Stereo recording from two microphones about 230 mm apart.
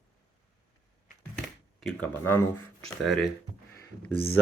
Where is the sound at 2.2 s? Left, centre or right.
Centre.